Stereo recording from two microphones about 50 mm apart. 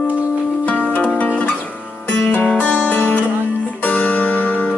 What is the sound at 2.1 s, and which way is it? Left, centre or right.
Music, left.